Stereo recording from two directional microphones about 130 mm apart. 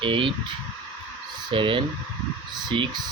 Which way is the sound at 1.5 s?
40° right (ahead or behind).